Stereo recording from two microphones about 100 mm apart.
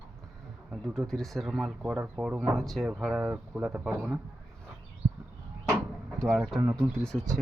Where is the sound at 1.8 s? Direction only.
15° right (ahead or behind).